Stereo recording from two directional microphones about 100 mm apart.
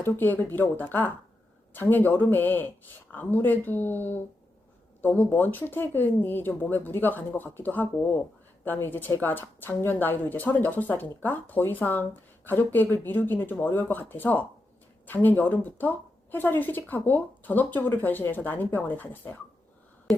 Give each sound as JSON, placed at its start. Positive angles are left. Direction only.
{"t": 0.0, "sound": "speech", "side_deg": 20}